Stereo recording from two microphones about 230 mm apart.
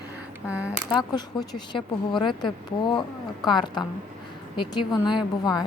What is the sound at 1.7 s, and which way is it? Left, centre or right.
A woman's voice, left.